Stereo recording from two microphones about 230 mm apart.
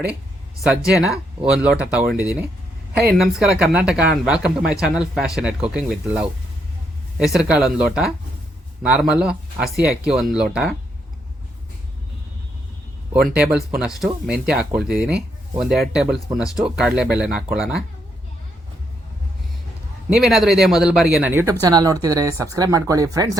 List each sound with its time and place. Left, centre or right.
1.4 s speech: centre
13.1 s speech: centre
20.1 s speech: centre